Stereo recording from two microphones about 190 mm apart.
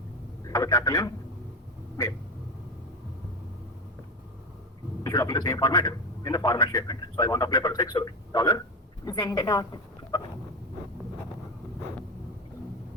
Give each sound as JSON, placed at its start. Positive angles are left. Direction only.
{"t": 0.4, "sound": "speech", "side_deg": 20}
{"t": 5.0, "sound": "a man's voice", "side_deg": 20}